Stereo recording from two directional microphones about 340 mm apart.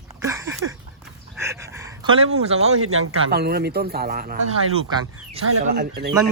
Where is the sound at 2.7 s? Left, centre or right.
Right.